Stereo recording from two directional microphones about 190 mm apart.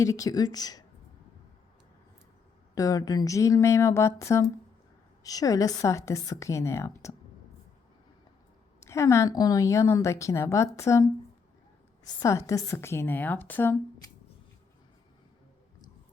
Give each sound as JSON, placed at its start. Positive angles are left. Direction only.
{"t": 0.0, "sound": "speech", "side_deg": 15}
{"t": 2.7, "sound": "a woman's voice", "side_deg": 20}
{"t": 8.8, "sound": "a woman's voice", "side_deg": 15}